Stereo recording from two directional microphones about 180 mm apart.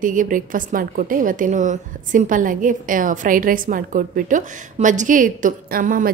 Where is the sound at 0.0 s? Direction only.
45° right (ahead or behind).